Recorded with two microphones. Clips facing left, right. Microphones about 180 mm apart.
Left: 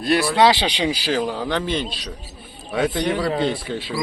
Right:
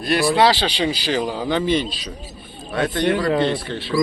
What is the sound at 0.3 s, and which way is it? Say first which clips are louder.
Speech: even; 20° left (ahead or behind).